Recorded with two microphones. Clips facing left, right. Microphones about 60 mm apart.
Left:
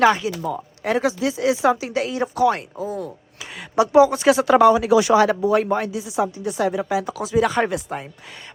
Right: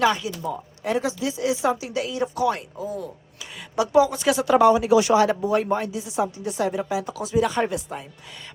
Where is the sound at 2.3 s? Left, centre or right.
Left.